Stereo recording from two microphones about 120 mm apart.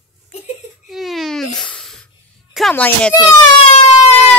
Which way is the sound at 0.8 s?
Centre (ahead or behind).